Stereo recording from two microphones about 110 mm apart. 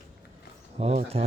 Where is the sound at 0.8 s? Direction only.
70° right (ahead or behind).